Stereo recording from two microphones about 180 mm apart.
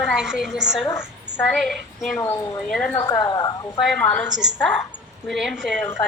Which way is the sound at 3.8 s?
5° left (ahead or behind).